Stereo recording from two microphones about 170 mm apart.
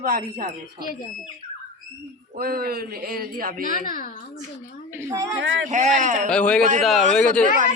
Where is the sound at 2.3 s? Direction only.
60° right (ahead or behind).